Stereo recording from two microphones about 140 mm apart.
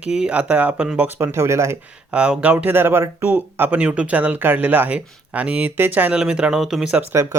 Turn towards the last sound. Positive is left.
turn(degrees=-20)  # may be behind; listen again after turning